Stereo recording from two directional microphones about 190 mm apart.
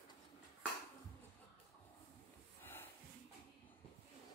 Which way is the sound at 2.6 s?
10° left (ahead or behind).